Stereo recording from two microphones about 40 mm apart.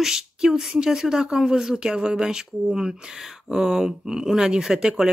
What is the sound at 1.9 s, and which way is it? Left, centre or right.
Speech, right.